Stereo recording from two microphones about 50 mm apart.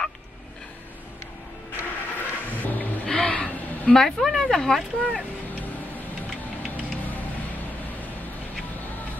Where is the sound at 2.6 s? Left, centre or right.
Left.